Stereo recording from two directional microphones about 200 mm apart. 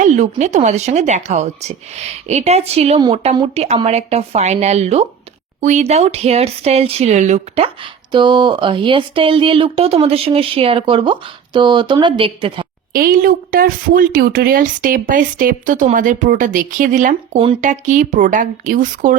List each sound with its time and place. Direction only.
0.0 s speech: 35° right (ahead or behind)
12.9 s a woman's voice: 45° right (ahead or behind)